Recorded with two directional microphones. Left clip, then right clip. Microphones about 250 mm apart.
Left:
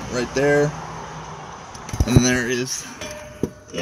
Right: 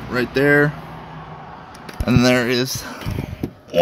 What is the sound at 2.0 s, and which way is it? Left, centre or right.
Speech, right.